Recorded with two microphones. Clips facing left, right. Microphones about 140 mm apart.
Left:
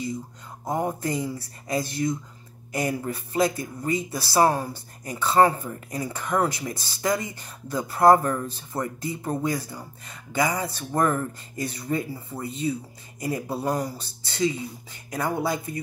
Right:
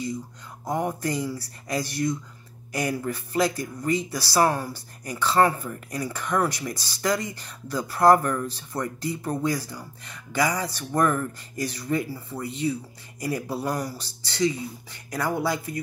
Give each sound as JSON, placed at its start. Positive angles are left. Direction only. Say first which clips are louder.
{"t": 0.7, "sound": "speech", "louder": "even", "side_deg": 25}